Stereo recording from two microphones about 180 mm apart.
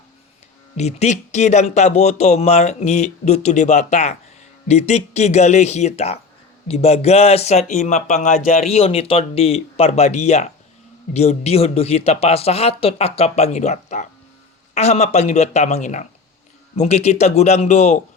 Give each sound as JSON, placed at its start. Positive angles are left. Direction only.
{"t": 0.8, "sound": "speech", "side_deg": 35}